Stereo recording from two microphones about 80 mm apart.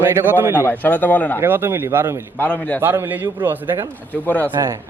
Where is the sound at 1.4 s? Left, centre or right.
Right.